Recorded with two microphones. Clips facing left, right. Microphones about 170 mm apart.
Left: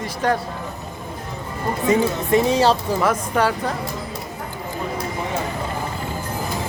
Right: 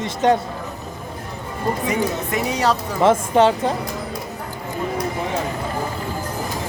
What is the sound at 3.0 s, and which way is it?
Speech, 25° right (ahead or behind).